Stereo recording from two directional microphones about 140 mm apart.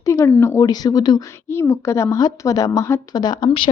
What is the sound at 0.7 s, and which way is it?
Speech, 30° left (ahead or behind).